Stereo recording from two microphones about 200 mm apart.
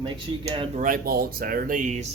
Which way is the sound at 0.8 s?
45° right (ahead or behind).